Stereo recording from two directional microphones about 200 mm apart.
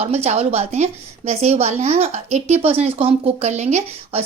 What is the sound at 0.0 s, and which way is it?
A woman's voice, 30° right (ahead or behind).